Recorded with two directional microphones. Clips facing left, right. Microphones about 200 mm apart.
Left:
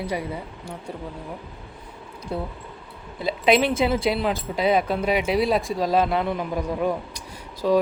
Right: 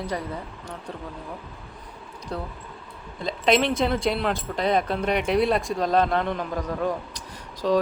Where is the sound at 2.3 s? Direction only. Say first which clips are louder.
Left 3 dB; 10° left (ahead or behind).